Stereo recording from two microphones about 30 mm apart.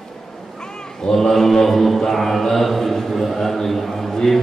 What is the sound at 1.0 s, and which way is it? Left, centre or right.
Mantra, centre.